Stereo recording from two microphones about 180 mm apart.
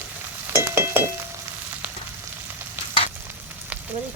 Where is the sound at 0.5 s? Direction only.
15° right (ahead or behind).